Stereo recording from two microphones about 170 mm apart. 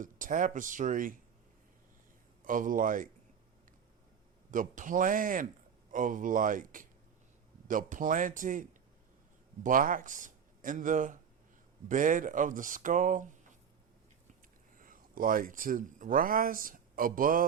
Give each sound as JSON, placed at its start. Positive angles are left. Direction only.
{"t": 0.0, "sound": "speech", "side_deg": -50}
{"t": 2.4, "sound": "speech", "side_deg": -50}
{"t": 4.5, "sound": "speech", "side_deg": -50}
{"t": 9.6, "sound": "speech", "side_deg": -55}
{"t": 14.8, "sound": "speech", "side_deg": -55}